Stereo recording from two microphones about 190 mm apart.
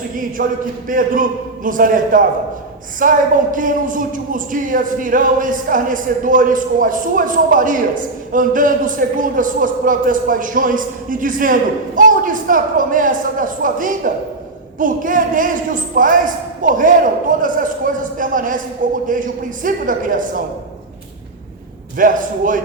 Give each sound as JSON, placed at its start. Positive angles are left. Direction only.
{"t": 0.4, "sound": "a woman's voice", "side_deg": -45}
{"t": 21.9, "sound": "a woman's voice", "side_deg": -45}